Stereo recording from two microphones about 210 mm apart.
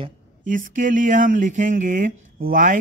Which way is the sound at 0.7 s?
40° right (ahead or behind).